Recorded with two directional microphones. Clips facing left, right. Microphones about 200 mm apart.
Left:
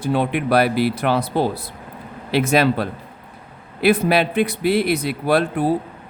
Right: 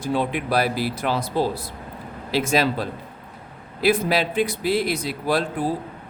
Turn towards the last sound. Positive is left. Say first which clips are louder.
# left 4 dB
turn(degrees=60)  # may be behind; listen again after turning